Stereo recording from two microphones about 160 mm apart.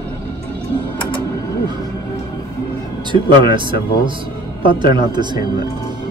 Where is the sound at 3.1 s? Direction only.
30° right (ahead or behind).